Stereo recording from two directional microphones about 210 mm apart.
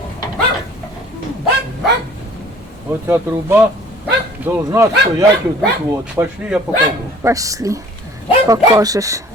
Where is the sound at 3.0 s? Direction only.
10° right (ahead or behind).